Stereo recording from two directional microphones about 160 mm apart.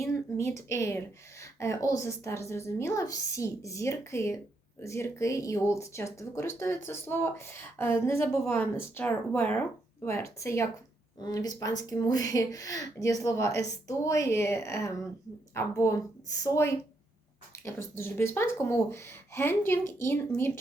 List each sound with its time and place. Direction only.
0.0 s speech: 20° left (ahead or behind)